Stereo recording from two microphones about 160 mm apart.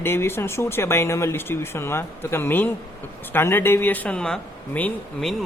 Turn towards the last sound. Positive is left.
turn(degrees=5)  # may be behind; listen again after turning